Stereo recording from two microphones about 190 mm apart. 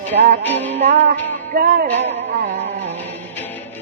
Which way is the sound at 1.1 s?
50° right (ahead or behind).